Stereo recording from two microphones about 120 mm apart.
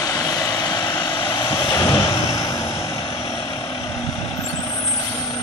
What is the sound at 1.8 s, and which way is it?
Vehicle, 25° left (ahead or behind).